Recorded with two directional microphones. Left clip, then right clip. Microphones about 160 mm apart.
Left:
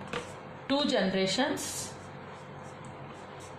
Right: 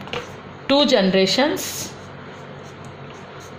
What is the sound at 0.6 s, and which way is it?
Speech, 70° right (ahead or behind).